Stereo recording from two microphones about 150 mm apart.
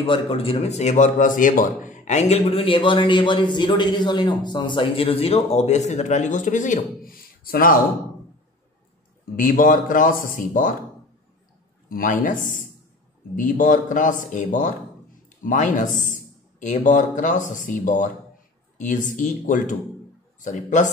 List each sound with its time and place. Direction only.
0.0 s speech: 40° left (ahead or behind); by 7.8 s 70° left (ahead or behind)
9.4 s a man's voice: 65° left (ahead or behind)
11.9 s a man's voice: 70° left (ahead or behind)